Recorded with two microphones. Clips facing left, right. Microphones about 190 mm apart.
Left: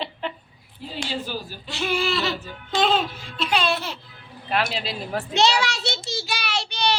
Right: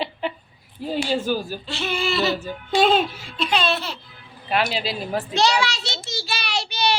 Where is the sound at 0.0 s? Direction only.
10° right (ahead or behind).